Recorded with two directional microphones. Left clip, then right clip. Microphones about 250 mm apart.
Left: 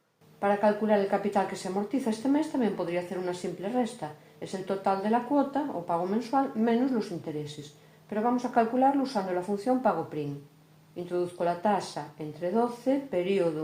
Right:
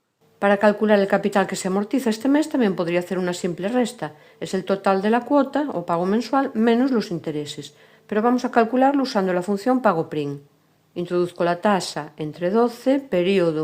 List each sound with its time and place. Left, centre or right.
0.3 s speech: right